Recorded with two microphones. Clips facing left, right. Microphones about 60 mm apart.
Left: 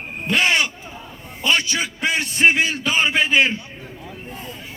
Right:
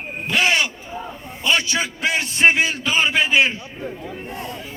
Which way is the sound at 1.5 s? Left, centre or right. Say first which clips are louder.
Even; right.